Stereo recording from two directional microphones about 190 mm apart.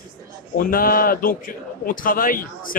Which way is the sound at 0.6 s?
50° left (ahead or behind).